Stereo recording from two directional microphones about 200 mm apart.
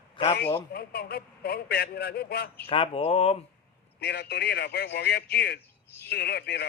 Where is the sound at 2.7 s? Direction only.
25° left (ahead or behind).